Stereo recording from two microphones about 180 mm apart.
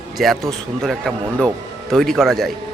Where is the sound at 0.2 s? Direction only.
Centre (ahead or behind).